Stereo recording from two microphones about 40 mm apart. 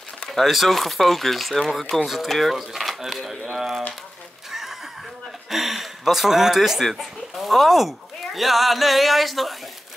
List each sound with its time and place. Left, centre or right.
0.3 s speech: centre
2.5 s speech: centre
4.5 s neigh: centre
5.5 s speech: centre